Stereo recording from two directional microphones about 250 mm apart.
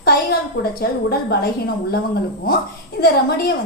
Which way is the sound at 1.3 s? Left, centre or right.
Left.